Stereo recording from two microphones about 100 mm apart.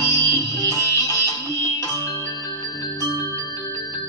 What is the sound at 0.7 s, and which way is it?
Music, 35° left (ahead or behind).